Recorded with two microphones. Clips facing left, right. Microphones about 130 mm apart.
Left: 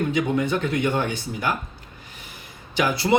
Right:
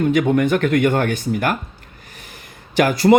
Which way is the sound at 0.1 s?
55° right (ahead or behind).